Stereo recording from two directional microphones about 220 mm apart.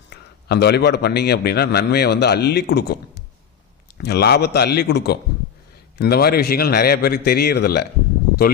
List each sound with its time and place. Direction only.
0.1 s a man's voice: 50° left (ahead or behind)